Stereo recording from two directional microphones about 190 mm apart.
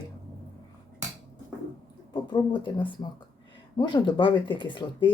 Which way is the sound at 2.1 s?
25° left (ahead or behind).